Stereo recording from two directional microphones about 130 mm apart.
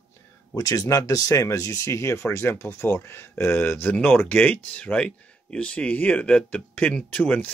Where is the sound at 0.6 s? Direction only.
30° left (ahead or behind).